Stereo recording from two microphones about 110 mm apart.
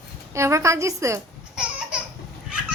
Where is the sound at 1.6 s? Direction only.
10° right (ahead or behind).